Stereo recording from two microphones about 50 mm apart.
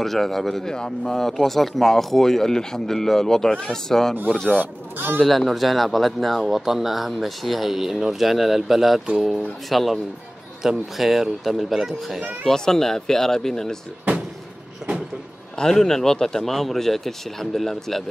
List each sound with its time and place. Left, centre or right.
0.0 s speech: centre
4.6 s speech: right
5.2 s a man's voice: centre
12.4 s speech: centre
15.6 s speech: centre